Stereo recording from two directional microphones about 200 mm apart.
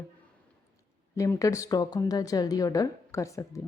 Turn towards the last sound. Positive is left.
turn(degrees=15)  # may be behind; listen again after turning